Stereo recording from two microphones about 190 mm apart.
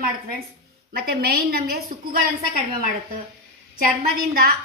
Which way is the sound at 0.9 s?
55° right (ahead or behind).